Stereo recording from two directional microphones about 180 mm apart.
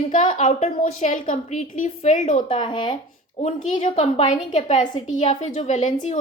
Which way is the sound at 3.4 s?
40° left (ahead or behind).